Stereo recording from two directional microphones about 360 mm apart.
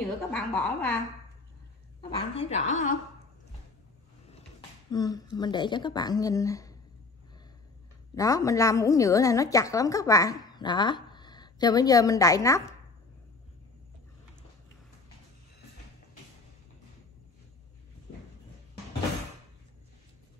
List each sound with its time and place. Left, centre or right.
0.3 s a woman's voice: centre
2.0 s a woman's voice: centre
4.9 s a woman's voice: centre
8.1 s a woman's voice: centre